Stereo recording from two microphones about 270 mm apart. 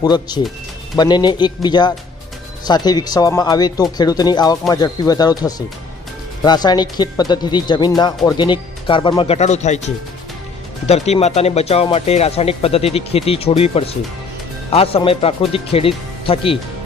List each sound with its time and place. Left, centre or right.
0.0 s speech: centre